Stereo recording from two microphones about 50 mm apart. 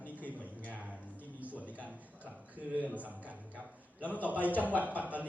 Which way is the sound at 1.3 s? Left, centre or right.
Right.